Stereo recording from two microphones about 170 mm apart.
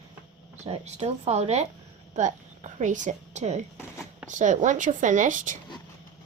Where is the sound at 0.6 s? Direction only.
40° right (ahead or behind).